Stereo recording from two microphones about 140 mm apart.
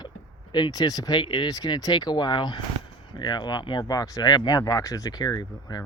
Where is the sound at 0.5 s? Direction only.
30° left (ahead or behind).